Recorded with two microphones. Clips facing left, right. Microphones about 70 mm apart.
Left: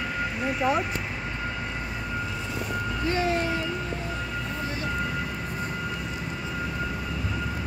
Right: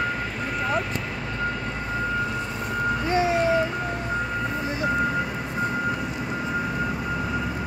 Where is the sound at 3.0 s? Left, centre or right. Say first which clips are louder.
Right 2 dB; right.